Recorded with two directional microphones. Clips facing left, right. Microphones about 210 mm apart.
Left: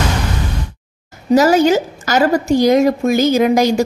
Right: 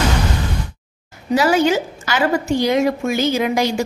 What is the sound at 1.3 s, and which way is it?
A woman's voice, 40° left (ahead or behind).